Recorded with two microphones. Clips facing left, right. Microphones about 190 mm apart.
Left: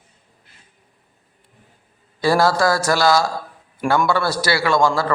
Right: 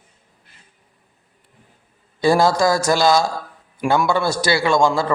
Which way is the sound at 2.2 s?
20° right (ahead or behind).